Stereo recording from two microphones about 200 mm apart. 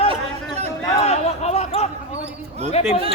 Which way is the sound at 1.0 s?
30° left (ahead or behind).